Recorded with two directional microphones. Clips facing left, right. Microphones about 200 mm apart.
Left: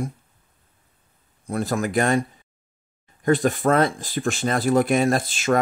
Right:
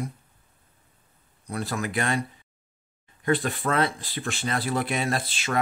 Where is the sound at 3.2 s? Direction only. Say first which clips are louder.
Left 6 dB; 45° left (ahead or behind).